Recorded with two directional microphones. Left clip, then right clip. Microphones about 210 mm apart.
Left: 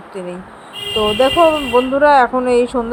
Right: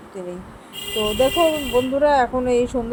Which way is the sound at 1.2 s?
10° left (ahead or behind).